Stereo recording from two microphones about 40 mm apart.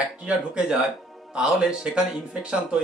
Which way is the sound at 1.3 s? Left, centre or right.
Centre.